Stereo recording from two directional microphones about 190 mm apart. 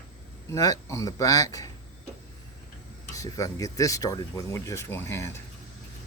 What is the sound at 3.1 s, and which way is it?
Speech, 15° left (ahead or behind).